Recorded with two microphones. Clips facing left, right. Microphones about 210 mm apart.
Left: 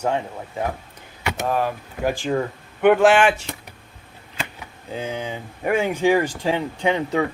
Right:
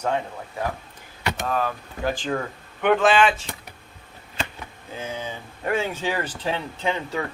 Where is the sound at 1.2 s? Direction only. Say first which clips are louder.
Left 3 dB; 15° left (ahead or behind).